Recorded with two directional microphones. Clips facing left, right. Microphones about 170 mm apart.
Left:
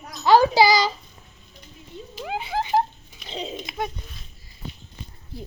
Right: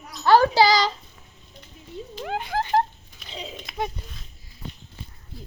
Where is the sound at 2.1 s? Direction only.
5° left (ahead or behind).